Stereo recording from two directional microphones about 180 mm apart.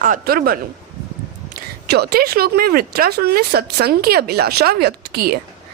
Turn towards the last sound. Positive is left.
turn(degrees=-60)  # may be behind; listen again after turning